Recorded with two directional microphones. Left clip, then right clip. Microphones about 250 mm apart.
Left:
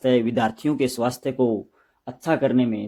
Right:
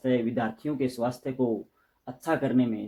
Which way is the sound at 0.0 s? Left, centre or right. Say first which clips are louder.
Left 7 dB; left.